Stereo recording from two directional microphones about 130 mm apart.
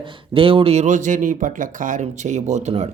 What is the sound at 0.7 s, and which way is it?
Speech, 75° right (ahead or behind).